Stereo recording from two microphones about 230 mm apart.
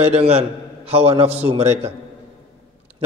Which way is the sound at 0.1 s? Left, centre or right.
Right.